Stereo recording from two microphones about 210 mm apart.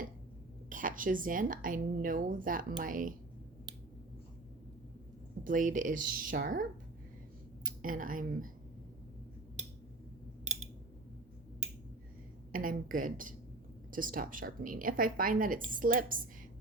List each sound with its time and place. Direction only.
0.7 s speech: 40° right (ahead or behind)
5.4 s speech: 40° right (ahead or behind)
12.5 s speech: 40° right (ahead or behind)